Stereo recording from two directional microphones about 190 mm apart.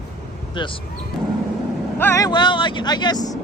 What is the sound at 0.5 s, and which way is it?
Speech, 25° left (ahead or behind).